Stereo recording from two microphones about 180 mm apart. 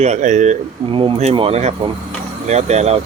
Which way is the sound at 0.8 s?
30° right (ahead or behind).